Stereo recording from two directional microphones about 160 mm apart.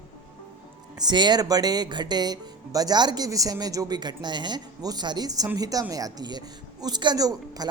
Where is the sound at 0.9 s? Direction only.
25° right (ahead or behind).